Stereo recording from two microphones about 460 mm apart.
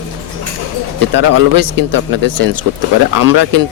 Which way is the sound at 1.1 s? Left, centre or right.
Right.